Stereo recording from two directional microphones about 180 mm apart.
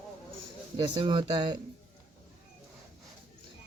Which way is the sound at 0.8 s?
25° right (ahead or behind).